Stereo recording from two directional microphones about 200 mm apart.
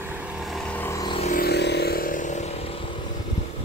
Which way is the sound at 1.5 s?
55° left (ahead or behind).